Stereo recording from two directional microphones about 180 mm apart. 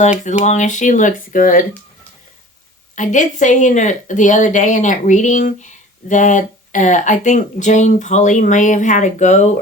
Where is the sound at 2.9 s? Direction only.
45° left (ahead or behind).